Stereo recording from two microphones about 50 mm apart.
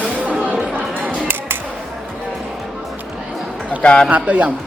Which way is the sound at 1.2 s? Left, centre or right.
Right.